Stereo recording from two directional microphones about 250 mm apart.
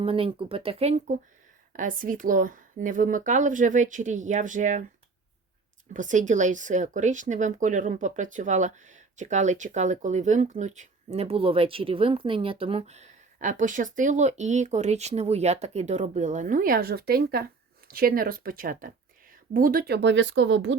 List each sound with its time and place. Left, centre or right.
0.0 s speech: right
5.9 s speech: right